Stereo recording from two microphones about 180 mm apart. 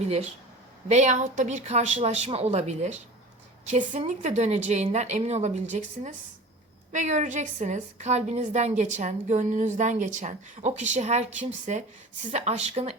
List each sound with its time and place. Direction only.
0.9 s a woman's voice: 40° right (ahead or behind)